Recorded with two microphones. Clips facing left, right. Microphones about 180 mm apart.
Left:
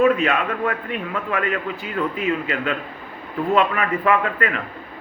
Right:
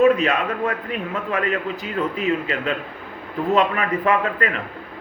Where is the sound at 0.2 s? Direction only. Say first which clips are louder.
Even; 35° right (ahead or behind).